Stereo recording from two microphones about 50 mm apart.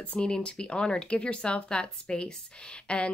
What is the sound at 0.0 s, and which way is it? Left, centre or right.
Speech, left.